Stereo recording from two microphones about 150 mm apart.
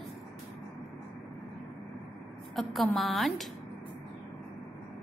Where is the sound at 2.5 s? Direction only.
Centre (ahead or behind).